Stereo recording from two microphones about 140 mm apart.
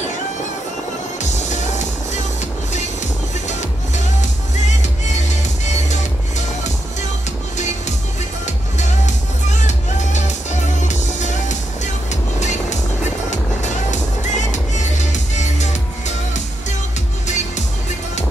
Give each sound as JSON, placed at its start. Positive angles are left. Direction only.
{"t": 1.3, "sound": "music", "side_deg": 55}
{"t": 5.3, "sound": "music", "side_deg": 55}
{"t": 8.7, "sound": "music", "side_deg": 60}